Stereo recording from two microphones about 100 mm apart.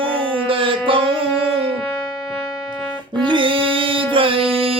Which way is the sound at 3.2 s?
55° right (ahead or behind).